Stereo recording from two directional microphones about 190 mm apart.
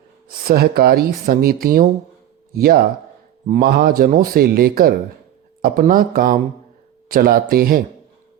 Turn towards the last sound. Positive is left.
turn(degrees=-50)  # may be behind; listen again after turning